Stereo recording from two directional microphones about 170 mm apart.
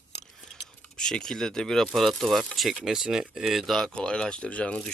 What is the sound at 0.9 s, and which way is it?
Speech, 5° left (ahead or behind).